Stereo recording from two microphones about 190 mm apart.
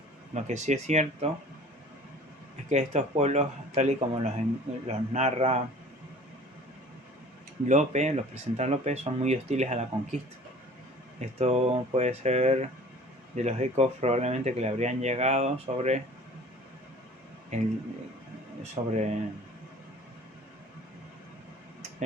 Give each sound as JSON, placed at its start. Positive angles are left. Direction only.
{"t": 0.3, "sound": "speech", "side_deg": -40}
{"t": 2.6, "sound": "speech", "side_deg": -35}
{"t": 7.7, "sound": "speech", "side_deg": -40}
{"t": 11.2, "sound": "speech", "side_deg": -35}
{"t": 17.5, "sound": "speech", "side_deg": -35}